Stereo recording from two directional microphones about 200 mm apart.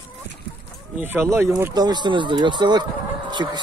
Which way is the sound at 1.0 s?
10° right (ahead or behind).